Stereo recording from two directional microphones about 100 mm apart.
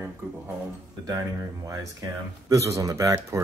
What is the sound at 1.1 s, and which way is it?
Speech, 35° right (ahead or behind).